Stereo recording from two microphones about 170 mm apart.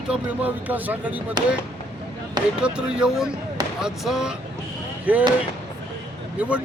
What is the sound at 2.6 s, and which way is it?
Speech, 5° right (ahead or behind).